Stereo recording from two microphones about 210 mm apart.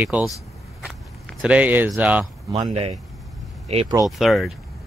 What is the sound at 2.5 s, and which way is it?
Speech, 30° right (ahead or behind).